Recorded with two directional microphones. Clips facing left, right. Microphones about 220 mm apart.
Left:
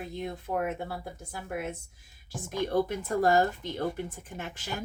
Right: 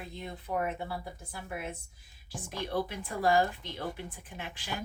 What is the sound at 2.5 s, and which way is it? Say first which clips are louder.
Speech: left 6 dB; 45° left (ahead or behind).